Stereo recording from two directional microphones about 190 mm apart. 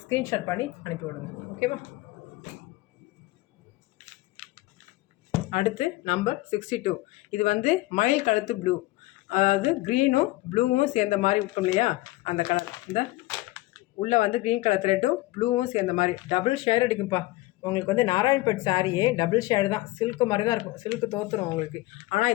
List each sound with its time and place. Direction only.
0.1 s speech: 15° left (ahead or behind)
5.5 s speech: 40° left (ahead or behind)